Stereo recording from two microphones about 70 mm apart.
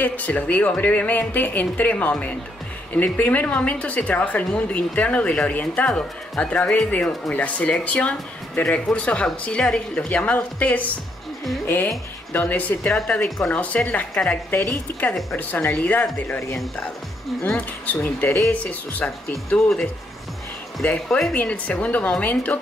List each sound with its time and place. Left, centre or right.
0.0 s speech: left
5.9 s a woman's voice: centre
14.9 s speech: left
18.0 s speech: left
19.0 s speech: centre
20.8 s a woman's voice: centre